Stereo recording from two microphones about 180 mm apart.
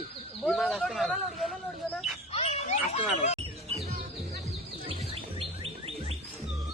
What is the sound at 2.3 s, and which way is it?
A child's voice, 35° left (ahead or behind).